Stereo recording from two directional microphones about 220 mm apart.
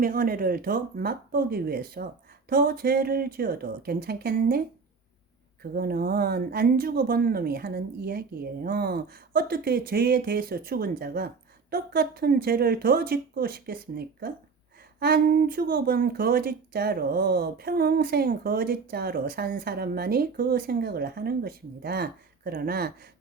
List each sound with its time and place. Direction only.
0.0 s speech: 40° right (ahead or behind)
5.7 s speech: 45° right (ahead or behind)